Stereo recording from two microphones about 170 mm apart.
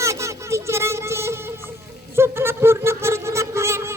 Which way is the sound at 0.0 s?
15° right (ahead or behind).